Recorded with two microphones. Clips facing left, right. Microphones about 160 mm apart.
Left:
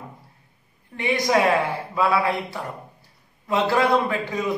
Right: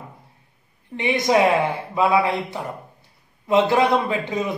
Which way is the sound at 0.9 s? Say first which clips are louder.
Right 2 dB; 20° right (ahead or behind).